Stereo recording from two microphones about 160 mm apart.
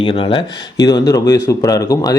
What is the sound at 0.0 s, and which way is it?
Speech, 35° left (ahead or behind).